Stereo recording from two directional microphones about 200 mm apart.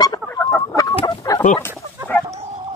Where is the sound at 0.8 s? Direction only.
20° left (ahead or behind).